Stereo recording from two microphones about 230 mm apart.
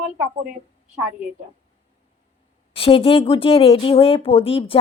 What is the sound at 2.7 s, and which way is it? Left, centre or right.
Speech, left.